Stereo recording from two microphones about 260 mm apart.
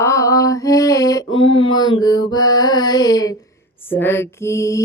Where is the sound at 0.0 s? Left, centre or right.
Centre.